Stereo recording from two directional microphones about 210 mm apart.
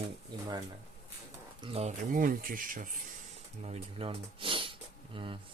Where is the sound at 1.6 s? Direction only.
30° right (ahead or behind).